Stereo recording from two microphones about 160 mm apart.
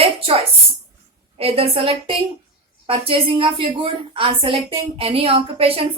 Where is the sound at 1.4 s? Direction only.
40° right (ahead or behind).